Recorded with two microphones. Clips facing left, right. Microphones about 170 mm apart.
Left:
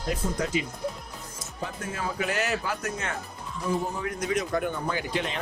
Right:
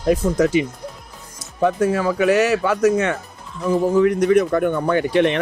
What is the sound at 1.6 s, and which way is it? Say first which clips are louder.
Speech: right 15 dB; 80° right.